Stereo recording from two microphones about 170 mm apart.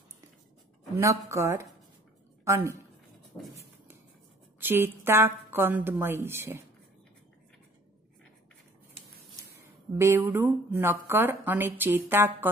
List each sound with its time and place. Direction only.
0.9 s speech: 15° right (ahead or behind)
4.6 s speech: 10° right (ahead or behind)
9.9 s speech: 15° right (ahead or behind)